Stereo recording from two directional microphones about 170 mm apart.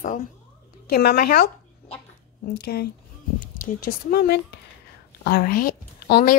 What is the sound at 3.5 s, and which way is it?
A woman's voice, 55° left (ahead or behind).